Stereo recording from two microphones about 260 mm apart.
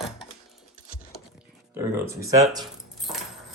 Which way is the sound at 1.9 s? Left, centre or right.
Centre.